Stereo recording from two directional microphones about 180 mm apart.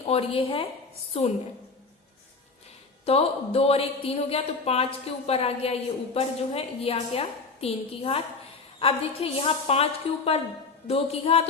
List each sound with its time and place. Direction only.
0.1 s a woman's voice: 30° left (ahead or behind)
3.1 s a woman's voice: 35° left (ahead or behind)